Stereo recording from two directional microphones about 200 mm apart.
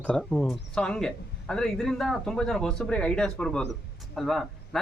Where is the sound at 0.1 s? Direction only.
5° left (ahead or behind).